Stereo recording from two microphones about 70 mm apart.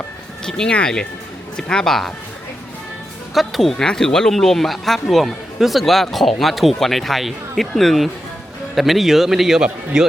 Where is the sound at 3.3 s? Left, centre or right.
Centre.